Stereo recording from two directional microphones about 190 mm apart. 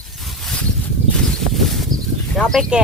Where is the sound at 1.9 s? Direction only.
20° right (ahead or behind).